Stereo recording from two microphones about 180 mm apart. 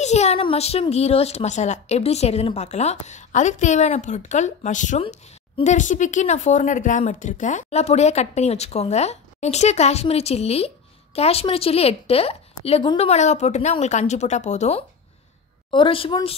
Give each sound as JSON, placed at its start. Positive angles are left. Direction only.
{"t": 0.0, "sound": "a woman's voice", "side_deg": 40}